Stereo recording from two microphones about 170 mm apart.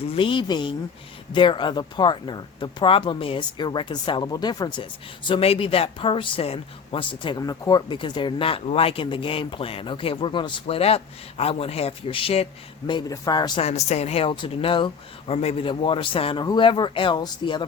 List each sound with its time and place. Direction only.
0.1 s speech: 30° left (ahead or behind)
12.9 s speech: 25° left (ahead or behind)
13.6 s speech: 40° left (ahead or behind)